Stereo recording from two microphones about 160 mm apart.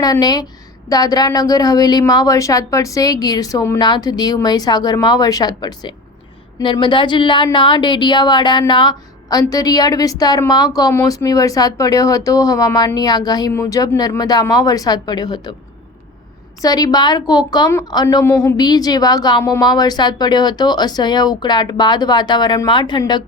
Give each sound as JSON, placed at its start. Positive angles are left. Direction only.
{"t": 0.0, "sound": "a woman's voice", "side_deg": 25}
{"t": 16.6, "sound": "a woman's voice", "side_deg": 25}